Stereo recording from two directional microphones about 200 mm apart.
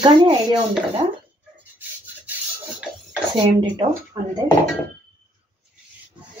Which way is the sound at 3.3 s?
25° right (ahead or behind).